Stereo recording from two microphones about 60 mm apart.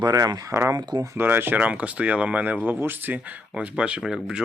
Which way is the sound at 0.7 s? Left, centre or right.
Right.